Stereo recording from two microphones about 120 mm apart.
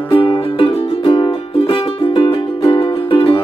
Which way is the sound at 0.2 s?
45° left (ahead or behind).